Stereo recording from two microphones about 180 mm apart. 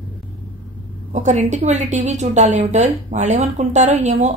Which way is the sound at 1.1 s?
40° right (ahead or behind).